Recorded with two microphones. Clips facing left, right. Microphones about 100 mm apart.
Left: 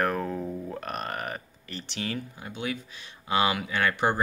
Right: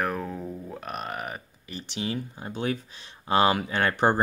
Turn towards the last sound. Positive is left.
turn(degrees=-35)  # may be behind; listen again after turning